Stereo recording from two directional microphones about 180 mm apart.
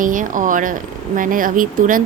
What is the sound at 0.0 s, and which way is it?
A woman's voice, 50° right (ahead or behind).